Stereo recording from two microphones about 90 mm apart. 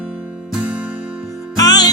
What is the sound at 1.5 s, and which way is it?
Music, 45° left (ahead or behind).